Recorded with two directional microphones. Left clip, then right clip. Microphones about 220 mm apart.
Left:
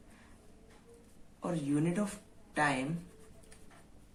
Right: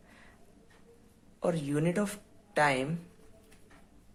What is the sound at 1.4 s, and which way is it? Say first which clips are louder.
Speech: right 4 dB; 40° right (ahead or behind).